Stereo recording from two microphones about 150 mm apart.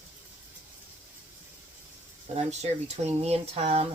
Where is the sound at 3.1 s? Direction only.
45° right (ahead or behind).